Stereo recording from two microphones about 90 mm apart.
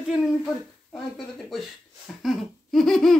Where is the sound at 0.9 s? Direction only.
5° left (ahead or behind).